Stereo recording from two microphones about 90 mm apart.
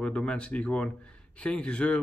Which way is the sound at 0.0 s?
10° left (ahead or behind).